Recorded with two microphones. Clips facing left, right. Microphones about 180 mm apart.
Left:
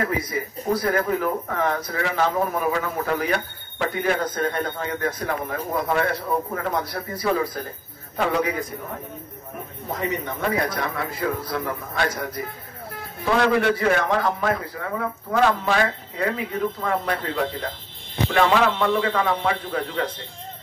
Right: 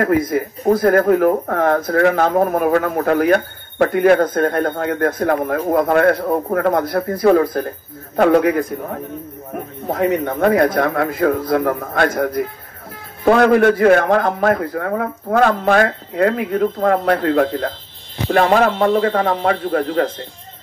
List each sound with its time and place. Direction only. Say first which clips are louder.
0.0 s speech: right 9 dB; 50° right (ahead or behind)